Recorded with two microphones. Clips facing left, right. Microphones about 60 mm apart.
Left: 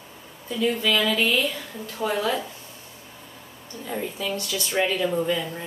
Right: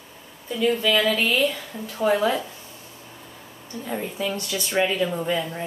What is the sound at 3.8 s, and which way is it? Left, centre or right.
Speech, centre.